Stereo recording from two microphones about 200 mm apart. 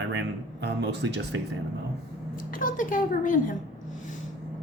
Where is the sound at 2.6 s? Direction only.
40° left (ahead or behind).